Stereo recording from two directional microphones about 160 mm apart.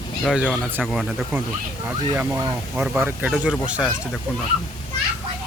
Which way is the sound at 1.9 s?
15° right (ahead or behind).